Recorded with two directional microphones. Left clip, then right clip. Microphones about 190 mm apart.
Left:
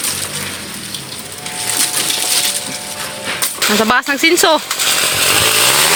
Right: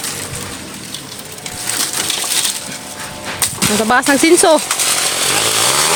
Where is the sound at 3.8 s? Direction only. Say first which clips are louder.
Right 2 dB; 5° right (ahead or behind).